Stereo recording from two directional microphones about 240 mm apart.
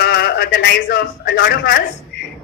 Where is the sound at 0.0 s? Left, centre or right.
Left.